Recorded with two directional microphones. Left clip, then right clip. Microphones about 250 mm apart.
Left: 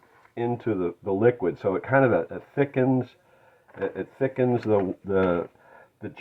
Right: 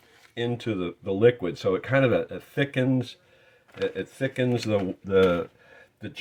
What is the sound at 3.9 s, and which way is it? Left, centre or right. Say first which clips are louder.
Speech: left 2 dB; right.